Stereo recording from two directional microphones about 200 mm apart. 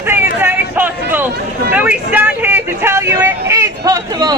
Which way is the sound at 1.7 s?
10° right (ahead or behind).